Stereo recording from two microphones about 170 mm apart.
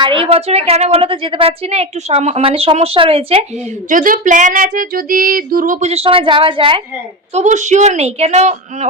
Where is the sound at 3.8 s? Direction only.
55° right (ahead or behind); by 6.8 s 30° right (ahead or behind).